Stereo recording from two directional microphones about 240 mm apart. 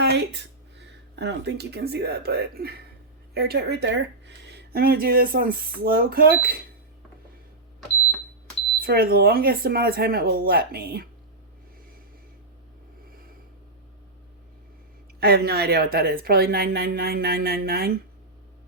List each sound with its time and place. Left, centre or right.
0.0 s speech: right
8.8 s speech: right
15.2 s speech: right